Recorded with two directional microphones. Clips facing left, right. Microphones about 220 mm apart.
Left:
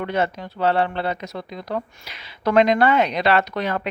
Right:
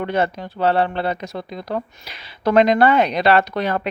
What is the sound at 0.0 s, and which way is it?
Speech, 35° right (ahead or behind).